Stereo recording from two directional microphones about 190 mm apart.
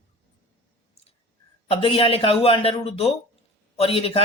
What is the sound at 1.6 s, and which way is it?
Speech, 30° left (ahead or behind).